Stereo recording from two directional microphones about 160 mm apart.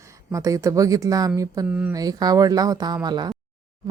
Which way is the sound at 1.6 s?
10° right (ahead or behind).